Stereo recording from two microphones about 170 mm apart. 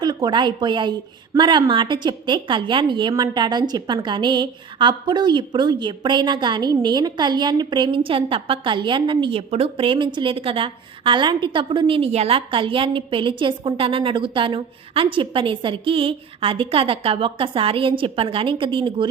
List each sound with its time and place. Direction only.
0.0 s a woman's voice: 25° right (ahead or behind)